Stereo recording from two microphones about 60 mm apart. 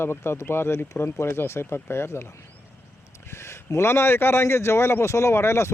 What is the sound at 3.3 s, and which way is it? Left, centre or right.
Speech, left.